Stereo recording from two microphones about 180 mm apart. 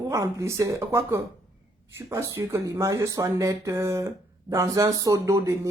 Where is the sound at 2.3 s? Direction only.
15° right (ahead or behind).